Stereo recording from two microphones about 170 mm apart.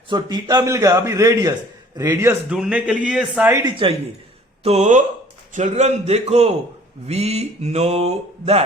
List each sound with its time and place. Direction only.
0.1 s a man's voice: 25° right (ahead or behind)
2.5 s speech: 5° right (ahead or behind)
3.6 s speech: 30° right (ahead or behind)